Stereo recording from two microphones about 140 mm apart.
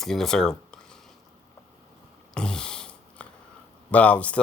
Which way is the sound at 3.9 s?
10° left (ahead or behind).